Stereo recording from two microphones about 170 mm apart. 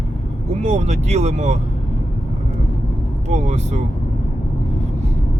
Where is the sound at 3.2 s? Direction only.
40° right (ahead or behind).